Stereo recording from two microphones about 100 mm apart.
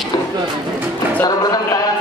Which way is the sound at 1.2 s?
40° left (ahead or behind).